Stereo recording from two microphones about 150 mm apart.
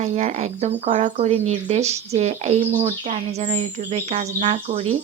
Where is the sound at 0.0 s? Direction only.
50° right (ahead or behind).